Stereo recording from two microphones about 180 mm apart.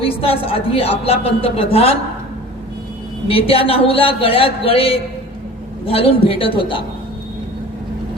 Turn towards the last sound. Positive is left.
turn(degrees=30)  # may be behind; listen again after turning